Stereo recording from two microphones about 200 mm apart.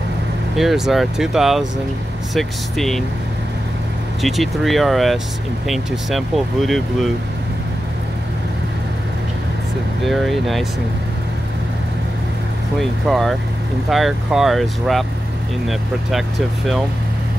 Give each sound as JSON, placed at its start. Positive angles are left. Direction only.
{"t": 0.6, "sound": "speech", "side_deg": 0}
{"t": 4.2, "sound": "speech", "side_deg": 0}
{"t": 10.0, "sound": "speech", "side_deg": 0}
{"t": 13.0, "sound": "speech", "side_deg": 0}